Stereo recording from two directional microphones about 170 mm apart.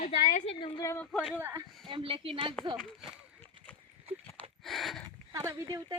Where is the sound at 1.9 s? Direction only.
30° right (ahead or behind).